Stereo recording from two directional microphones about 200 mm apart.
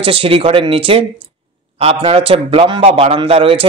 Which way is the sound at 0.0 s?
25° right (ahead or behind).